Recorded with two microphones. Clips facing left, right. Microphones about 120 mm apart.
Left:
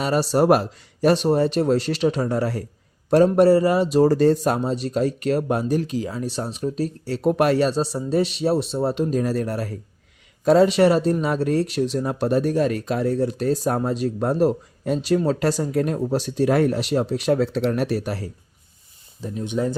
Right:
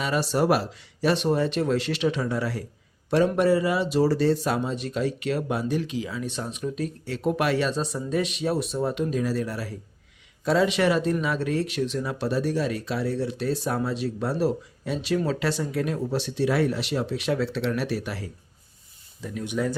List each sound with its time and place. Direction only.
0.0 s speech: 40° left (ahead or behind)
19.2 s speech: 25° left (ahead or behind)